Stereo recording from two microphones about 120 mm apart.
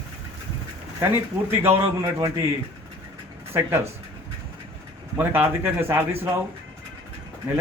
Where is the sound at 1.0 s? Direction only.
20° right (ahead or behind).